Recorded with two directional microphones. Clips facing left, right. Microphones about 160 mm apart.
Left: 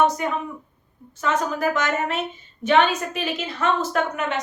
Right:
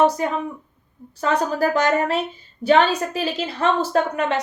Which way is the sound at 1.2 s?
35° right (ahead or behind).